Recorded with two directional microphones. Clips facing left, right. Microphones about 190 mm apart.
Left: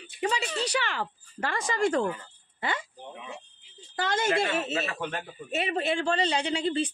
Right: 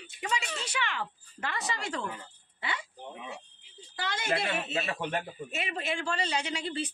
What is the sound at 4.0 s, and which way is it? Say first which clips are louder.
Speech: left 6 dB; 45° left (ahead or behind).